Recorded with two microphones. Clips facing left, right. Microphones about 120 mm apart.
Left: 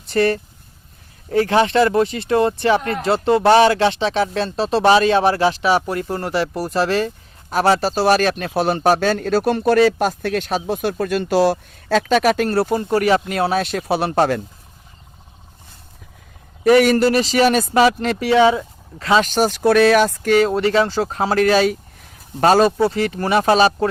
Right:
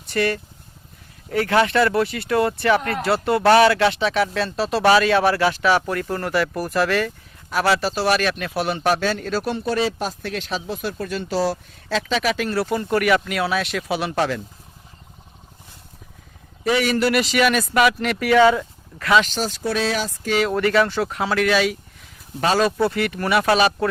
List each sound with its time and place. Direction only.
0.1 s speech: 35° left (ahead or behind); by 9.6 s 50° left (ahead or behind)
9.6 s speech: 60° left (ahead or behind)
12.5 s speech: 30° left (ahead or behind); by 14.4 s 50° left (ahead or behind)
16.6 s speech: 50° left (ahead or behind); by 19.2 s 25° left (ahead or behind)
19.2 s speech: 60° left (ahead or behind)
20.5 s speech: 25° left (ahead or behind)